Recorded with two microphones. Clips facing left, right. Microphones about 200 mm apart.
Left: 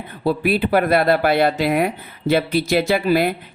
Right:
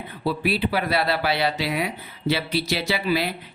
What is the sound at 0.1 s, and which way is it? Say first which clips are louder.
Speech: left 6 dB; 50° left (ahead or behind).